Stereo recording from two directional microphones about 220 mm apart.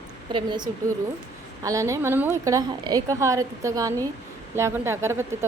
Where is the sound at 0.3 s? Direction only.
20° right (ahead or behind).